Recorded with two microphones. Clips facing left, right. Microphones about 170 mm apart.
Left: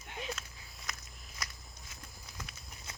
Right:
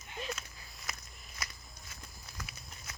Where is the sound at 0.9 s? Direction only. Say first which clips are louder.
Even; centre (ahead or behind).